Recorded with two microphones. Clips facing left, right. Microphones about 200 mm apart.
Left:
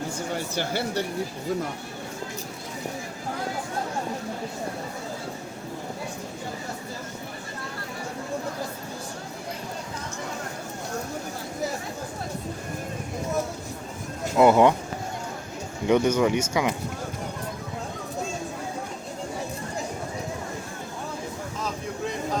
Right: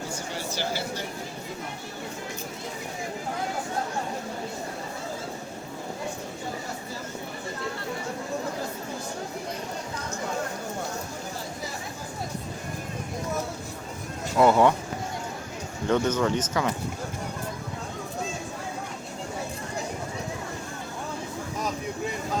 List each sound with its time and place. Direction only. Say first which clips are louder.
0.3 s speech: left 2 dB; 60° left (ahead or behind)
14.3 s speech: left 2 dB; 15° left (ahead or behind)
15.9 s speech: left 3 dB; 10° left (ahead or behind)